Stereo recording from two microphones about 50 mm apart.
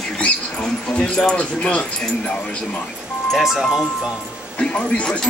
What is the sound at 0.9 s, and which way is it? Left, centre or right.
Speech, left.